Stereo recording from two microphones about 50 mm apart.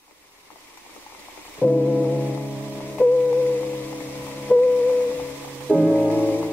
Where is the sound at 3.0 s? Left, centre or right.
Left.